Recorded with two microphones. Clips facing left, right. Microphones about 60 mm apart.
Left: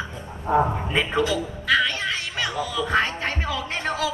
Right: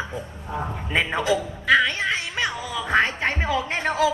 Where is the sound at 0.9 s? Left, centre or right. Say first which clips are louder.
Even; right.